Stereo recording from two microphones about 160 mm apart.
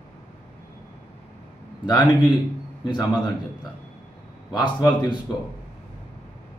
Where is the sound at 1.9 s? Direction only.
30° left (ahead or behind).